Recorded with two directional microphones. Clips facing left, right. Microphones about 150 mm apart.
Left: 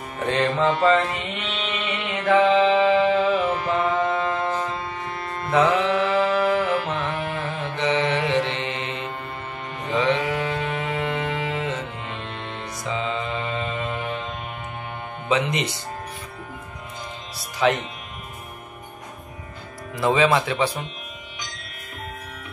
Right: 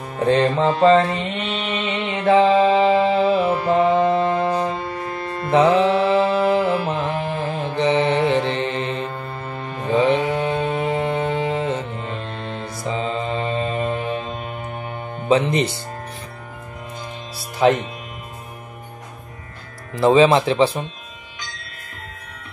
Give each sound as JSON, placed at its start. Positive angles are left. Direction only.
{"t": 0.2, "sound": "music", "side_deg": -35}
{"t": 1.7, "sound": "mantra", "side_deg": -30}
{"t": 5.5, "sound": "music", "side_deg": -30}
{"t": 15.2, "sound": "speech", "side_deg": -35}
{"t": 17.6, "sound": "music", "side_deg": -40}
{"t": 20.0, "sound": "speech", "side_deg": -30}